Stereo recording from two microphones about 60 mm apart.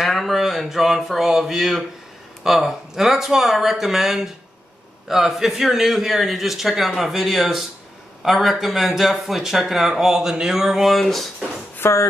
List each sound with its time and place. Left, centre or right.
0.0 s a man's voice: centre
11.8 s speech: left